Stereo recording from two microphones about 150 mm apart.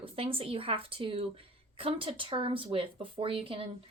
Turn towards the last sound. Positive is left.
turn(degrees=-35)  # may be behind; listen again after turning